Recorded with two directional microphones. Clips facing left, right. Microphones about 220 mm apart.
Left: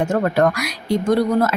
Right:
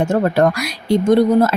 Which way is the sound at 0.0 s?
30° right (ahead or behind).